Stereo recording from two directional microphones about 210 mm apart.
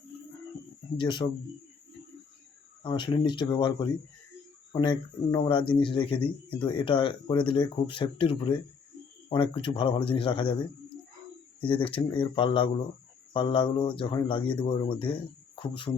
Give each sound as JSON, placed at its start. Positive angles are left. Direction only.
{"t": 0.9, "sound": "speech", "side_deg": 20}
{"t": 2.8, "sound": "speech", "side_deg": 20}